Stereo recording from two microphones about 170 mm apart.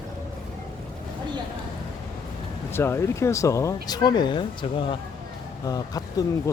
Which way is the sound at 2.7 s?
15° left (ahead or behind).